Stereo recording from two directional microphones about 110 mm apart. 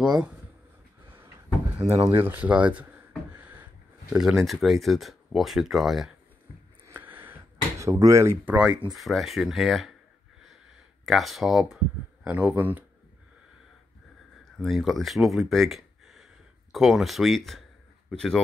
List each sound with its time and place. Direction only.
0.0 s speech: 5° right (ahead or behind)
1.8 s speech: 65° right (ahead or behind)
2.0 s speech: 20° right (ahead or behind)
3.3 s a sound: 15° right (ahead or behind)
4.1 s speech: 5° right (ahead or behind)
6.9 s a sound: 20° right (ahead or behind)
7.8 s speech: 25° right (ahead or behind)
8.9 s speech: centre (ahead or behind)
11.1 s speech: centre (ahead or behind)
14.4 s speech: centre (ahead or behind)